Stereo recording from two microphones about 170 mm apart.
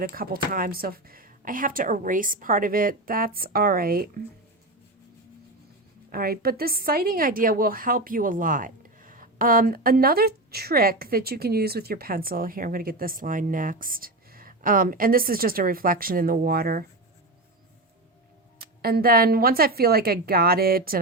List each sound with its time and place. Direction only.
0.0 s a woman's voice: 60° right (ahead or behind)
6.1 s a woman's voice: 60° right (ahead or behind)
18.8 s a woman's voice: 65° right (ahead or behind)